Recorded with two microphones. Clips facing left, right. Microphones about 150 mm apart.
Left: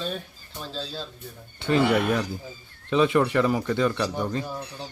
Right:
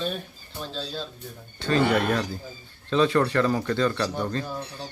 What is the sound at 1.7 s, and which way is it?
Speech, 15° left (ahead or behind).